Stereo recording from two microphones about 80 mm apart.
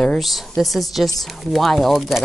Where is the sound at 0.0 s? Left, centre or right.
Centre.